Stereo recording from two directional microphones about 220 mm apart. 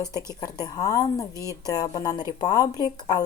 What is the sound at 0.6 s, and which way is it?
Speech, 15° left (ahead or behind).